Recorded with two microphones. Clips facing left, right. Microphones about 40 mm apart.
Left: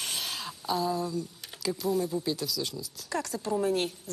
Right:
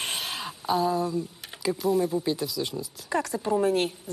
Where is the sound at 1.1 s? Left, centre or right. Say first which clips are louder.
Right 4 dB; right.